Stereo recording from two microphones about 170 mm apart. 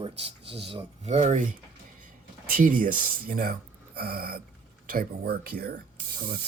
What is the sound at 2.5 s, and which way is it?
Speech, 50° right (ahead or behind).